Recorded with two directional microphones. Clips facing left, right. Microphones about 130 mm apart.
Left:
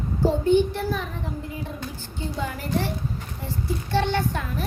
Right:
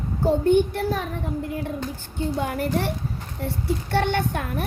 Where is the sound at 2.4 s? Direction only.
55° right (ahead or behind).